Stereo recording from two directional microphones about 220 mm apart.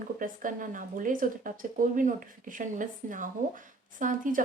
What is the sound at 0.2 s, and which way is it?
Speech, 35° right (ahead or behind).